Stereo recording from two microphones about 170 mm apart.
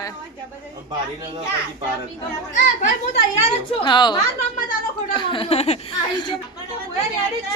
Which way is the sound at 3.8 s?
25° left (ahead or behind).